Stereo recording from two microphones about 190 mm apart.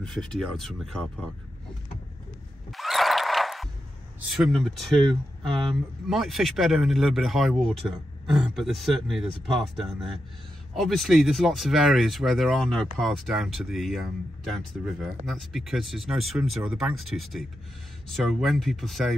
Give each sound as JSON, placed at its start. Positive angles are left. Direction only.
{"t": 0.0, "sound": "speech", "side_deg": 5}
{"t": 2.7, "sound": "a sound", "side_deg": 0}
{"t": 4.3, "sound": "speech", "side_deg": 0}
{"t": 5.0, "sound": "speech", "side_deg": -30}
{"t": 6.0, "sound": "speech", "side_deg": 0}